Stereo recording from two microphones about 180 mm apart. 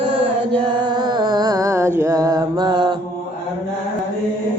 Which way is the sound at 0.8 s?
25° right (ahead or behind).